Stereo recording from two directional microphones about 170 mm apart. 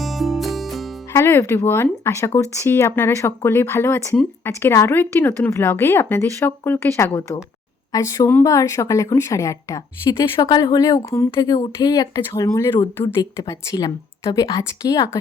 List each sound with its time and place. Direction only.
0.0 s music: centre (ahead or behind)
1.1 s a woman's voice: 15° left (ahead or behind)